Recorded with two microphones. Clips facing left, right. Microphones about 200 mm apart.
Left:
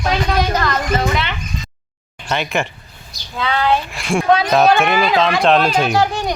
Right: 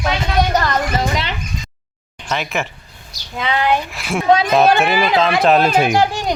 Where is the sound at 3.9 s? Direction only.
5° right (ahead or behind).